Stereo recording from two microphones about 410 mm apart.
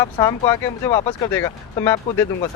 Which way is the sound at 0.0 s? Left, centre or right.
Centre.